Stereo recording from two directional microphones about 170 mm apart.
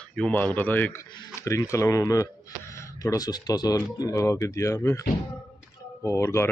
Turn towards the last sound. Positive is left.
turn(degrees=15)  # may be behind; listen again after turning